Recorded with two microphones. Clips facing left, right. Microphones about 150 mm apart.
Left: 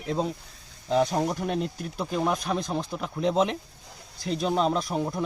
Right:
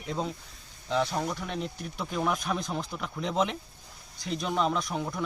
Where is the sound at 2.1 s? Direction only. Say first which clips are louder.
Left 3 dB; 30° left (ahead or behind).